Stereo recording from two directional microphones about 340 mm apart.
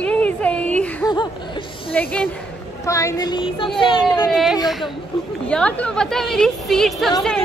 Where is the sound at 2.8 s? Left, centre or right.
Centre.